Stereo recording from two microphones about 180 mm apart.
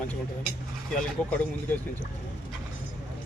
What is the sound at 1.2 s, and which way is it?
Speech, 5° left (ahead or behind).